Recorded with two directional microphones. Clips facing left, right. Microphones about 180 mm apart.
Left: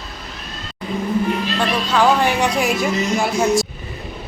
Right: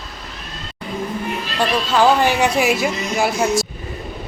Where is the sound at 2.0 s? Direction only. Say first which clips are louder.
Right 1 dB; 5° right (ahead or behind).